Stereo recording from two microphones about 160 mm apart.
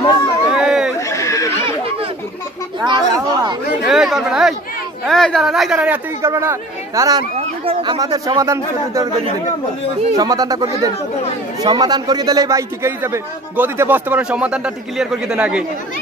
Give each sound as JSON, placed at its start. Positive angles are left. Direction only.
{"t": 0.5, "sound": "run", "side_deg": -5}
{"t": 0.9, "sound": "a sound", "side_deg": 20}
{"t": 2.8, "sound": "a sound", "side_deg": -25}
{"t": 3.8, "sound": "chatter", "side_deg": -5}
{"t": 5.0, "sound": "speech", "side_deg": 0}
{"t": 7.3, "sound": "speech", "side_deg": -35}
{"t": 8.0, "sound": "a man's voice", "side_deg": -20}
{"t": 10.1, "sound": "a man's voice", "side_deg": -25}